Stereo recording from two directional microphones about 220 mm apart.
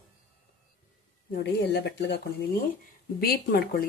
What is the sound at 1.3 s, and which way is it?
Speech, 45° left (ahead or behind).